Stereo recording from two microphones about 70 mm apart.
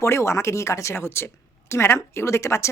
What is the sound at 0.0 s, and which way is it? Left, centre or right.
Speech, left.